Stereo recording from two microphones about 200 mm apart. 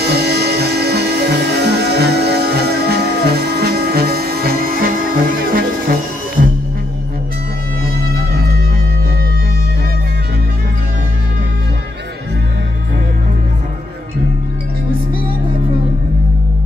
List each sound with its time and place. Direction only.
0.0 s music: 55° right (ahead or behind)